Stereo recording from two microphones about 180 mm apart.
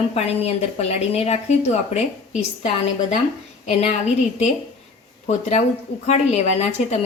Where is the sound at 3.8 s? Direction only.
35° left (ahead or behind).